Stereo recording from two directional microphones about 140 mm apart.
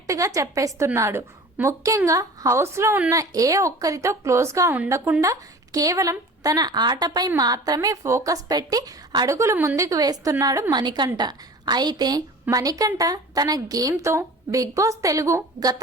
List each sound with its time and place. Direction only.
0.1 s a woman's voice: 25° right (ahead or behind)